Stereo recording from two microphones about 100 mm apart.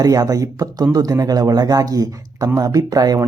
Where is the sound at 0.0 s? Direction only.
40° right (ahead or behind).